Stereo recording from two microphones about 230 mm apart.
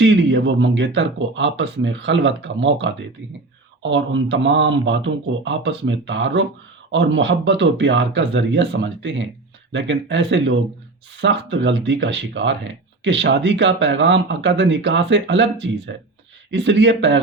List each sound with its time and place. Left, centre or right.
0.0 s speech: right